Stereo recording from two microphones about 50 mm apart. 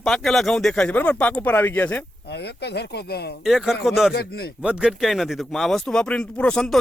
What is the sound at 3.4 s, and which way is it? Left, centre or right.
Speech, centre.